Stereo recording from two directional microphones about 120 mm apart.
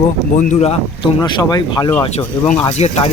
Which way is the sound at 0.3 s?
90° left.